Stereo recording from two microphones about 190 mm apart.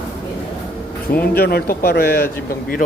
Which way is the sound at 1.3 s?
55° left (ahead or behind).